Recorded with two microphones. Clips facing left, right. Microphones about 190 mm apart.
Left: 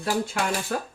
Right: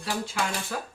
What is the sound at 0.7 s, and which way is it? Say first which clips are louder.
Speech: left 5 dB; 55° left (ahead or behind).